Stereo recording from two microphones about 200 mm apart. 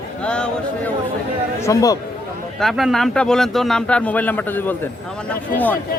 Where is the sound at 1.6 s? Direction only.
15° left (ahead or behind).